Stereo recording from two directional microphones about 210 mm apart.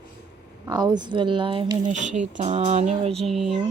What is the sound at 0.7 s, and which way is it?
Speech, 20° right (ahead or behind).